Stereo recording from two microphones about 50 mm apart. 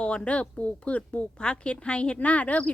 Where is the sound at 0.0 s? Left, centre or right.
Left.